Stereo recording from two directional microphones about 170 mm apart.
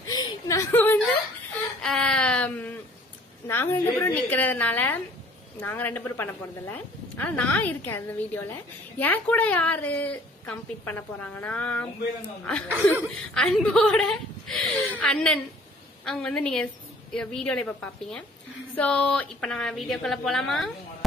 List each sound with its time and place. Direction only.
0.0 s chuckle: 20° left (ahead or behind)
1.8 s a sound: 5° left (ahead or behind)
3.4 s a woman's voice: 15° left (ahead or behind)
18.8 s a woman's voice: 5° left (ahead or behind)